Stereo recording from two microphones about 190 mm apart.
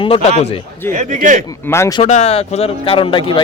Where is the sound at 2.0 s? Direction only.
35° left (ahead or behind).